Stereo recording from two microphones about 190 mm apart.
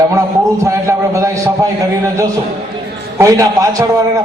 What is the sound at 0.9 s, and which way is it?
Speech, 15° right (ahead or behind).